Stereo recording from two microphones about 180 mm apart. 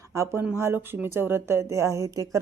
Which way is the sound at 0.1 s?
15° right (ahead or behind).